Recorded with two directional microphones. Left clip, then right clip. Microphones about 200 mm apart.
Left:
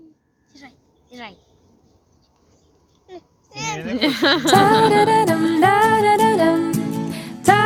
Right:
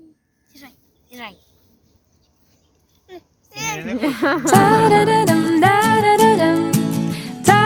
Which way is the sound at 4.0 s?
Centre (ahead or behind).